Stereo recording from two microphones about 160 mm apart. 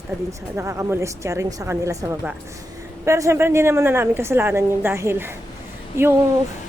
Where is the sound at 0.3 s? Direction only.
20° right (ahead or behind).